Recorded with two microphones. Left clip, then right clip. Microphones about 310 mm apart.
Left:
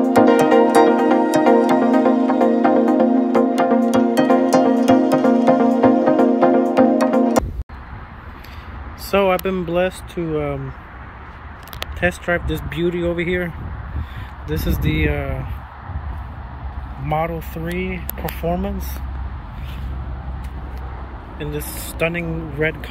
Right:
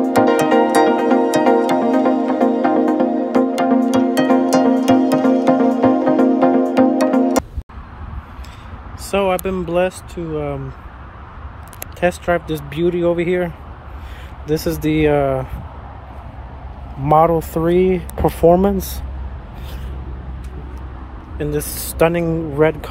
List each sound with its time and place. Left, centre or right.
0.0 s music: centre
9.1 s speech: centre
12.0 s speech: centre
14.5 s speech: centre
17.4 s speech: centre
21.4 s speech: centre